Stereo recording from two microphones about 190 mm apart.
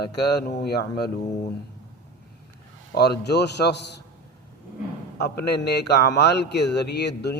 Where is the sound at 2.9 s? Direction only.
60° left (ahead or behind).